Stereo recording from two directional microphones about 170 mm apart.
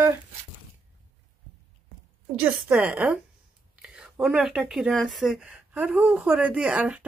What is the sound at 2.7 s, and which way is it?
A woman's voice, 10° right (ahead or behind).